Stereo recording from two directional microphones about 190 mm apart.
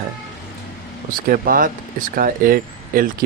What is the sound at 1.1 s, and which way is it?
Speech, 50° right (ahead or behind).